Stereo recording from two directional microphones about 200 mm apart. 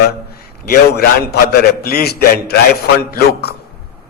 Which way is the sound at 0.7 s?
50° left (ahead or behind).